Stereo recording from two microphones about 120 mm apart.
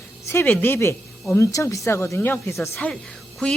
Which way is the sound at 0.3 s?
20° left (ahead or behind).